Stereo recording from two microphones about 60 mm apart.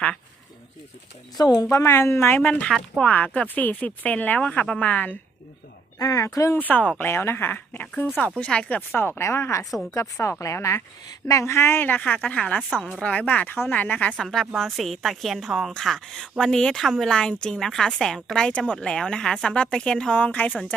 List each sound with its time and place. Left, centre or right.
1.4 s speech: left
1.8 s speech: left
2.4 s speech: left
4.8 s speech: left
6.0 s speech: left
6.6 s speech: left
7.0 s speech: left; by 8.8 s centre
9.0 s speech: left
11.8 s speech: left
14.2 s a woman's voice: centre
20.1 s speech: left